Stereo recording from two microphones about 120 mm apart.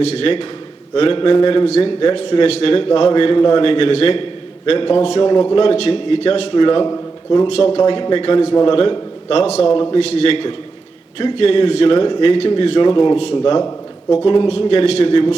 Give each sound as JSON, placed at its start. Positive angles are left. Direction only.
{"t": 0.1, "sound": "a man's voice", "side_deg": 55}
{"t": 5.3, "sound": "a man's voice", "side_deg": 35}
{"t": 5.6, "sound": "a man's voice", "side_deg": 55}
{"t": 6.9, "sound": "a sound", "side_deg": 35}
{"t": 7.5, "sound": "a man's voice", "side_deg": 55}
{"t": 7.8, "sound": "a man's voice", "side_deg": 40}
{"t": 12.9, "sound": "a man's voice", "side_deg": 35}